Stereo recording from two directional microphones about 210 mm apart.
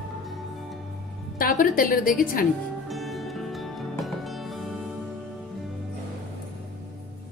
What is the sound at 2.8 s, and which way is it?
Music, centre (ahead or behind).